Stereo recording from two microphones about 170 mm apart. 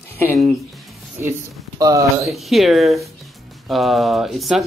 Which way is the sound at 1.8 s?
20° right (ahead or behind).